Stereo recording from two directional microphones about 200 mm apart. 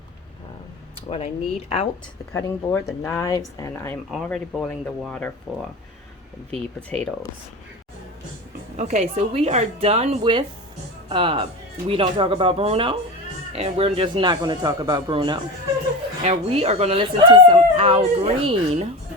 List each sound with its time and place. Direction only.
1.1 s speech: 30° left (ahead or behind)
2.3 s speech: 15° left (ahead or behind)
4.1 s speech: 5° left (ahead or behind)
6.5 s speech: 5° left (ahead or behind)
8.7 s speech: 35° right (ahead or behind)